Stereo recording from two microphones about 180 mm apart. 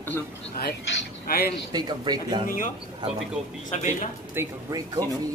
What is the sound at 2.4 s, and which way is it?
Speech, 50° left (ahead or behind).